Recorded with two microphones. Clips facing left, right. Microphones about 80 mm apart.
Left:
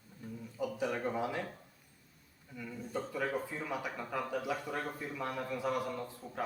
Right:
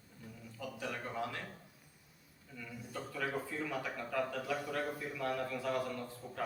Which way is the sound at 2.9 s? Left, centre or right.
Centre.